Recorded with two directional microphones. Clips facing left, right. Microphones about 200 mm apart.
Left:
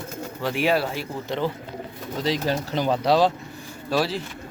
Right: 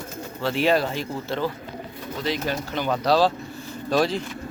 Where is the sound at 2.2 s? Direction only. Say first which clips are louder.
Left 2 dB; 35° left (ahead or behind).